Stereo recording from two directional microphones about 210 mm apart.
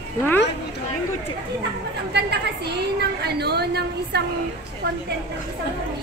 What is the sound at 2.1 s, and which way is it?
A woman's voice, 50° right (ahead or behind).